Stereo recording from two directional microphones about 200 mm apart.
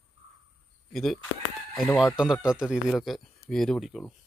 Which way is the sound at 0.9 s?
Centre (ahead or behind).